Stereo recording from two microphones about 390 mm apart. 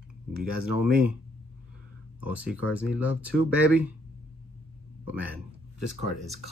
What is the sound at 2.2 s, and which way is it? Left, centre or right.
Speech, centre.